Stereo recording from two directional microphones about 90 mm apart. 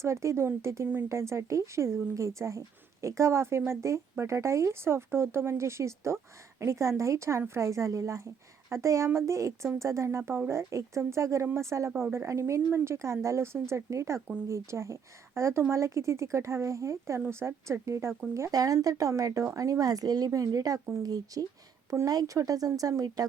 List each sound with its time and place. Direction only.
0.0 s speech: 30° right (ahead or behind)